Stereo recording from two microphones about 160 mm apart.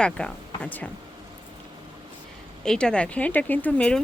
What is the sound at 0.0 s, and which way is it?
Speech, 5° left (ahead or behind).